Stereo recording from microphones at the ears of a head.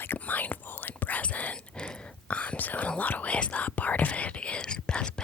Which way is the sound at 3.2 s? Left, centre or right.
Left.